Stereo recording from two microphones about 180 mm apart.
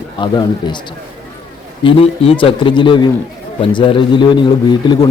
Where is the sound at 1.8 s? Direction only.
30° left (ahead or behind).